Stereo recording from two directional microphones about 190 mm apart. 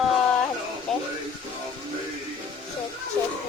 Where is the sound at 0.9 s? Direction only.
Centre (ahead or behind).